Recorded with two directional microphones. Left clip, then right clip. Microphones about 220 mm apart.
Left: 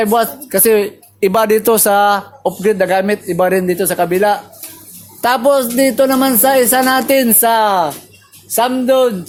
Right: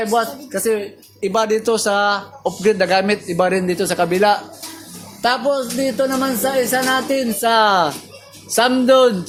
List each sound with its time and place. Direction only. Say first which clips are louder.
0.0 s speech: left 5 dB; 45° left (ahead or behind)
2.6 s speech: left 2 dB; 20° left (ahead or behind)
5.2 s a man's voice: left 6 dB; 40° left (ahead or behind)
7.4 s speech: right 2 dB; 15° left (ahead or behind)